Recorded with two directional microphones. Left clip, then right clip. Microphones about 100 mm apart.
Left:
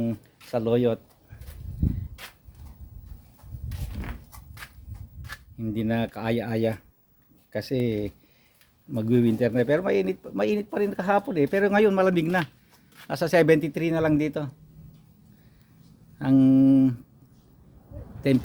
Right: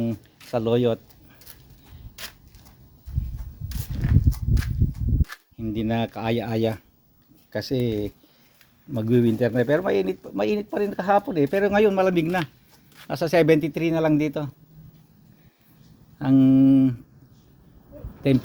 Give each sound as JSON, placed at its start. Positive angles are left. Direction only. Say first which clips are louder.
{"t": 0.0, "sound": "speech", "louder": "right 1 dB", "side_deg": -20}
{"t": 5.5, "sound": "speech", "louder": "right 2 dB", "side_deg": 0}
{"t": 16.3, "sound": "speech", "louder": "right 2 dB", "side_deg": 15}
{"t": 18.2, "sound": "speech", "louder": "right 2 dB", "side_deg": 15}